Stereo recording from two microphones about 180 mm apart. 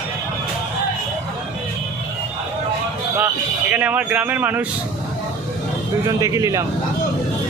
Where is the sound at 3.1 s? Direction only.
10° right (ahead or behind).